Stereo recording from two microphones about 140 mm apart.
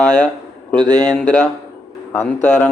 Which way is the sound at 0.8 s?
30° right (ahead or behind).